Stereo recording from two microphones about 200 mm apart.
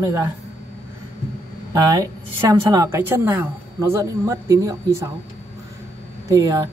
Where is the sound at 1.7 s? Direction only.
15° right (ahead or behind).